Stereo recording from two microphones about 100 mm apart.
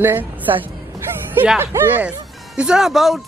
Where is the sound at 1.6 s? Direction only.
25° right (ahead or behind); by 3.2 s centre (ahead or behind).